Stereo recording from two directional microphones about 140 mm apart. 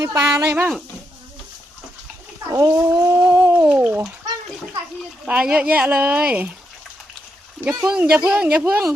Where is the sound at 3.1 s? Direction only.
15° right (ahead or behind).